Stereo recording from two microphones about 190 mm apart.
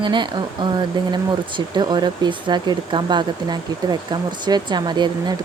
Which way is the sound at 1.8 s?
25° right (ahead or behind).